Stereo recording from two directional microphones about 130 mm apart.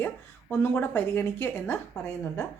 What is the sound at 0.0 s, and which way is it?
A woman's voice, 15° left (ahead or behind).